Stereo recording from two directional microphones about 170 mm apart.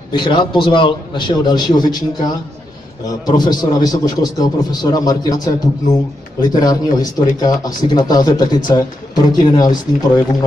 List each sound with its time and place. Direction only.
0.1 s speech: 30° left (ahead or behind)
3.1 s speech: 25° left (ahead or behind)